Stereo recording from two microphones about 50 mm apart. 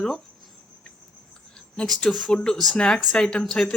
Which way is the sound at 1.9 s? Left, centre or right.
Centre.